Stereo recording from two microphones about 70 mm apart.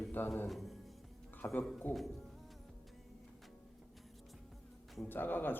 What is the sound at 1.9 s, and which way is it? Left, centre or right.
Speech, left.